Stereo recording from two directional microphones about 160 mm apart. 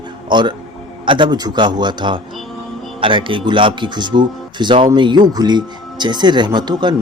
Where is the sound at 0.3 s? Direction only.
30° right (ahead or behind).